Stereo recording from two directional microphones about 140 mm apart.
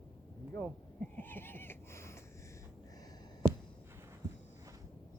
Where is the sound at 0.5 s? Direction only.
10° left (ahead or behind).